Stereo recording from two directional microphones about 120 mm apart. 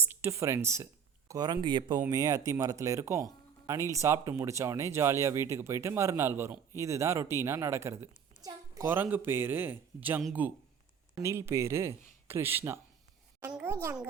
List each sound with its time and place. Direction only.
0.0 s speech: 20° right (ahead or behind)
8.9 s speech: 15° right (ahead or behind)